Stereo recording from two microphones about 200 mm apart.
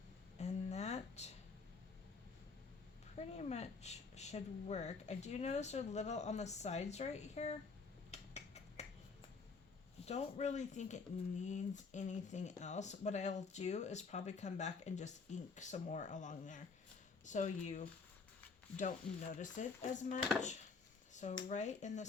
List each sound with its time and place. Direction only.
0.3 s a sound: 35° left (ahead or behind)
3.2 s speech: 35° left (ahead or behind)
8.1 s finger snapping: 35° left (ahead or behind)
10.1 s speech: 35° left (ahead or behind)